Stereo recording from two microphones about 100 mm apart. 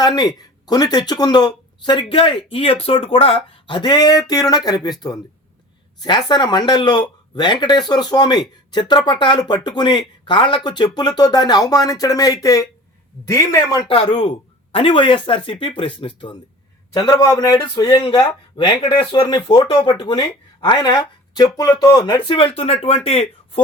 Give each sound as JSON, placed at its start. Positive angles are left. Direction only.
{"t": 0.0, "sound": "speech", "side_deg": 40}
{"t": 13.8, "sound": "speech", "side_deg": 60}
{"t": 16.9, "sound": "speech", "side_deg": 45}
{"t": 18.1, "sound": "speech", "side_deg": 50}
{"t": 19.7, "sound": "speech", "side_deg": 60}
{"t": 20.1, "sound": "speech", "side_deg": 50}